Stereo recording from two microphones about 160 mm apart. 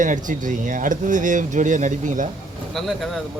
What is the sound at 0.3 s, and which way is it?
Speech, 55° right (ahead or behind).